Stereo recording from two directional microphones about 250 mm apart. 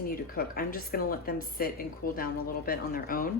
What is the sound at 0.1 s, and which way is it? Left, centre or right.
Speech, left.